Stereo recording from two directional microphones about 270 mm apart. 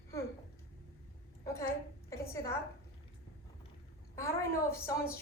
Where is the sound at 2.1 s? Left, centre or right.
Centre.